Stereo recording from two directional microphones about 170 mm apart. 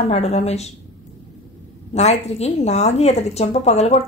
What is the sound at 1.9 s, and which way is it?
A woman's voice, 40° left (ahead or behind).